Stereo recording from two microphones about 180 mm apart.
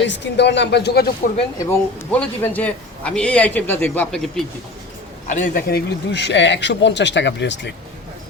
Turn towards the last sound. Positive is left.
turn(degrees=80)